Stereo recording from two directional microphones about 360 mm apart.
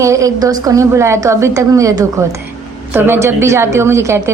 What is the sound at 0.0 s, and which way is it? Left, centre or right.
A woman's voice, centre.